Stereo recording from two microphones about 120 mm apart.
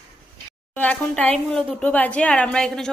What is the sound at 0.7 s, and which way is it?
A woman's voice, 10° left (ahead or behind).